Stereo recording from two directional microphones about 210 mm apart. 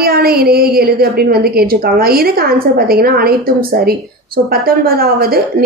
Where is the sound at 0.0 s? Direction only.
45° right (ahead or behind).